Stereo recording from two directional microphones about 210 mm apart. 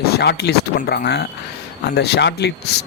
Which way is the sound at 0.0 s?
50° left (ahead or behind).